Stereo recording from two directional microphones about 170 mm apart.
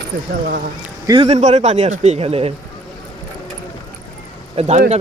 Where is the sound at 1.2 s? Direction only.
40° right (ahead or behind).